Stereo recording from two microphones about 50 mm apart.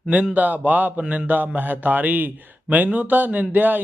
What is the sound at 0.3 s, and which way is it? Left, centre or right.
Speech, right.